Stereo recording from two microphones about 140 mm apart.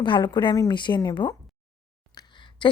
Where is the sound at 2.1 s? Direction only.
35° left (ahead or behind).